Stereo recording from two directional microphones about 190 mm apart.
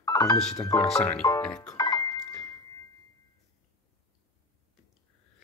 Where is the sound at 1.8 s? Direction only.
20° left (ahead or behind).